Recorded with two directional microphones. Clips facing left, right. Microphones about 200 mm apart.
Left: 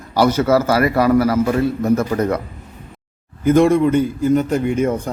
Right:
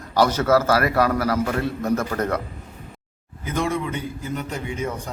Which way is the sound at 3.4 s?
50° left (ahead or behind).